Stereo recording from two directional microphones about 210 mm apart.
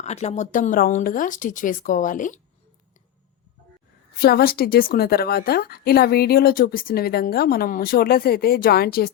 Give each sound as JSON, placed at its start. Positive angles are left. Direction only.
{"t": 0.0, "sound": "speech", "side_deg": 30}
{"t": 4.2, "sound": "a woman's voice", "side_deg": 45}